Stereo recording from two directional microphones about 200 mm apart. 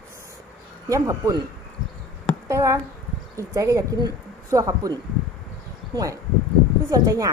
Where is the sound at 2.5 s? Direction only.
15° right (ahead or behind).